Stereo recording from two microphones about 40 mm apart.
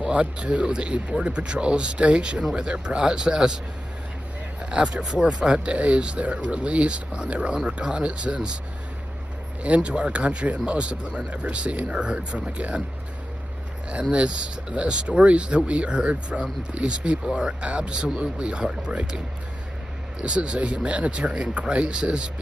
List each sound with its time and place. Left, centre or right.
0.1 s speech: right
4.6 s speech: right
9.6 s speech: right
14.1 s speech: right
20.2 s speech: right